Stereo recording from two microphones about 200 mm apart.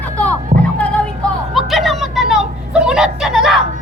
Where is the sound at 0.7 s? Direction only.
5° left (ahead or behind).